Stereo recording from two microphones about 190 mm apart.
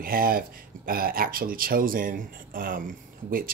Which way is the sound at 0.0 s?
50° right (ahead or behind).